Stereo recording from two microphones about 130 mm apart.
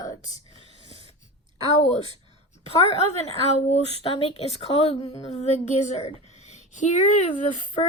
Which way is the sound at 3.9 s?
45° left (ahead or behind).